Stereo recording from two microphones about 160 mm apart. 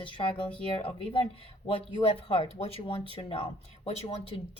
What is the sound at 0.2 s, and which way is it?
Speech, 30° left (ahead or behind).